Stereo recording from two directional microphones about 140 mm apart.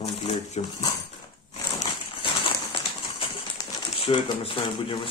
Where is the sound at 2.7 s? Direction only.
40° left (ahead or behind).